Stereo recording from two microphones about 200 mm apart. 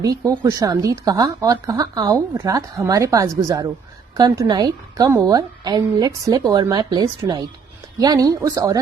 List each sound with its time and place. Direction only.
0.0 s a woman's voice: 15° right (ahead or behind)